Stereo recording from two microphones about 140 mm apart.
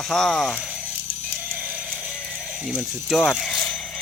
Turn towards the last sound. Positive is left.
turn(degrees=0)  # may be behind; listen again after turning